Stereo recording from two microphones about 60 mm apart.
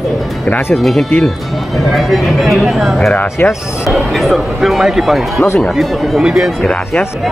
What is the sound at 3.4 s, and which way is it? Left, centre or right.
Speech, left.